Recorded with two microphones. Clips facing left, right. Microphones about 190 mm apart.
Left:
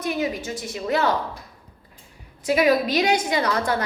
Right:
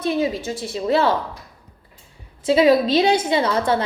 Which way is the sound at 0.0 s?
25° right (ahead or behind).